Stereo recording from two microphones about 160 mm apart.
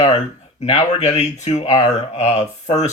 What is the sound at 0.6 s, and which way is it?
Speech, 40° left (ahead or behind).